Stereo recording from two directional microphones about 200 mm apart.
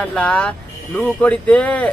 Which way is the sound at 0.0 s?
5° left (ahead or behind).